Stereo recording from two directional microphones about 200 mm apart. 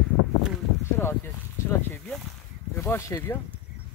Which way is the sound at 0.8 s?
10° left (ahead or behind).